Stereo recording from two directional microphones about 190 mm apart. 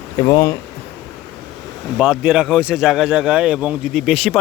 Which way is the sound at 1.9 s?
5° right (ahead or behind).